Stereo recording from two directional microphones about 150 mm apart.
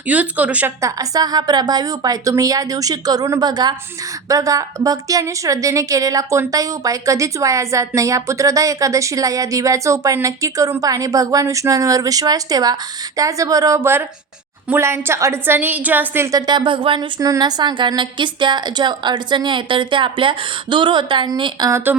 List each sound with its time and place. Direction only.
0.1 s a woman's voice: 10° right (ahead or behind)
0.8 s a woman's voice: 25° right (ahead or behind)
16.5 s a woman's voice: 30° right (ahead or behind)
17.2 s a woman's voice: 25° right (ahead or behind)
21.7 s a woman's voice: 20° right (ahead or behind)